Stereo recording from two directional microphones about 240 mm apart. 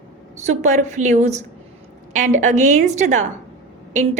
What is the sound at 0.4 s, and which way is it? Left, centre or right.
A woman's voice, right.